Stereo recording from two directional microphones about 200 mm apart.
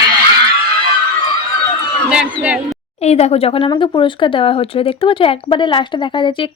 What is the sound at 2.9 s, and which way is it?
Speech, 35° left (ahead or behind).